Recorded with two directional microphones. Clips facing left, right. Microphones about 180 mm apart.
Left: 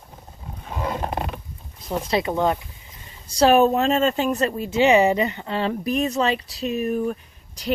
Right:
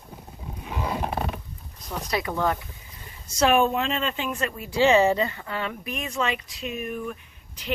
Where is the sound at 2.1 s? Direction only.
25° left (ahead or behind).